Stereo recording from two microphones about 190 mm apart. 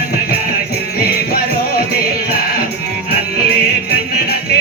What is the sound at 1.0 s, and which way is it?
Music, 55° left (ahead or behind).